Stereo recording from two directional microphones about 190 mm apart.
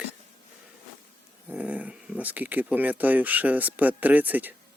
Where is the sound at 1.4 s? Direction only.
5° right (ahead or behind).